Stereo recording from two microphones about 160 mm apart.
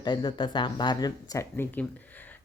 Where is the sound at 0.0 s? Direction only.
30° left (ahead or behind).